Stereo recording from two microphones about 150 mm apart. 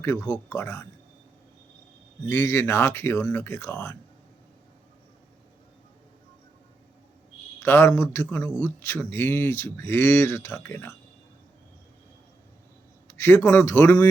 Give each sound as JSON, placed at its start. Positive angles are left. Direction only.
{"t": 0.0, "sound": "speech", "side_deg": 20}
{"t": 2.3, "sound": "speech", "side_deg": 20}
{"t": 7.6, "sound": "speech", "side_deg": 15}
{"t": 13.1, "sound": "speech", "side_deg": 20}